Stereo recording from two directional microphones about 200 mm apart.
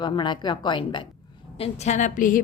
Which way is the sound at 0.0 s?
20° left (ahead or behind).